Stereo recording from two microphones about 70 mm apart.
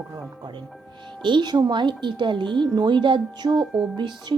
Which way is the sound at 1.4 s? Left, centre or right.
Right.